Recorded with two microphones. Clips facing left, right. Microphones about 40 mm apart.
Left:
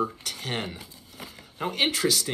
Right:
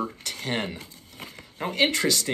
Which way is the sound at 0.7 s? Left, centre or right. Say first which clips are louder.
Right 1 dB; right.